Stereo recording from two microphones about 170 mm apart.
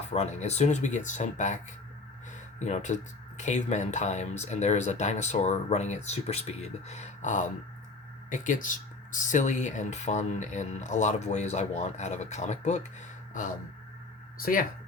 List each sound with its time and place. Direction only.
0.1 s speech: 40° left (ahead or behind)
2.6 s speech: 45° left (ahead or behind)
14.3 s speech: 55° left (ahead or behind)